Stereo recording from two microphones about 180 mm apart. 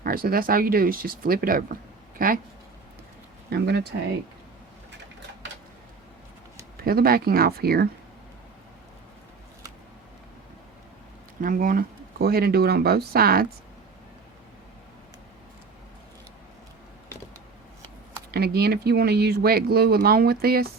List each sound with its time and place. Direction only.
0.0 s speech: 55° right (ahead or behind)
3.5 s speech: 65° right (ahead or behind)
6.7 s speech: 55° right (ahead or behind)
11.3 s speech: 50° right (ahead or behind)
17.8 s speech: 65° right (ahead or behind)